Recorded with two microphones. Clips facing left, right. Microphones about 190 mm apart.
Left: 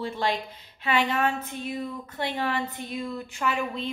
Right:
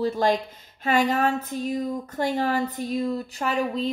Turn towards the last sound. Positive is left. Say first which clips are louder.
# right 4 dB
turn(degrees=-35)  # may be behind; listen again after turning